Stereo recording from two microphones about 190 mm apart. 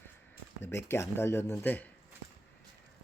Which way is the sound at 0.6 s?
10° left (ahead or behind).